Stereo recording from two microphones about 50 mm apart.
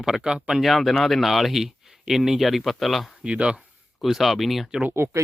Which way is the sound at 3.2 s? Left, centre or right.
Right.